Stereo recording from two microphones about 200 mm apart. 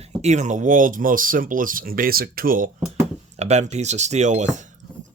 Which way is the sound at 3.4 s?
35° right (ahead or behind).